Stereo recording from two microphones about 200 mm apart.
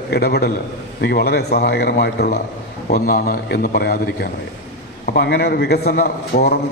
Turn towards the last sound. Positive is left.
turn(degrees=50)  # may be behind; listen again after turning